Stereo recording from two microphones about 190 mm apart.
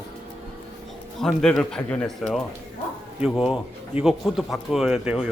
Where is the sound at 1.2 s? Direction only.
5° left (ahead or behind).